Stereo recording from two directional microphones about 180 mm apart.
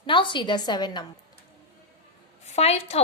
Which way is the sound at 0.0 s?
25° left (ahead or behind).